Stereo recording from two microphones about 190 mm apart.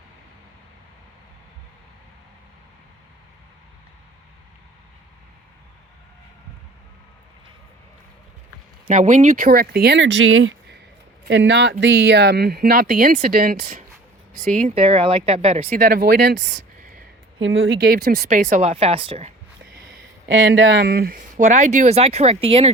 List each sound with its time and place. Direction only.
8.9 s speech: 40° right (ahead or behind)
9.5 s speech: 55° right (ahead or behind)
14.4 s speech: 40° right (ahead or behind)
15.7 s speech: 50° right (ahead or behind)
17.4 s speech: 80° right; by 19.3 s 30° right (ahead or behind)
20.2 s speech: 70° right (ahead or behind); by 22.7 s 30° right (ahead or behind)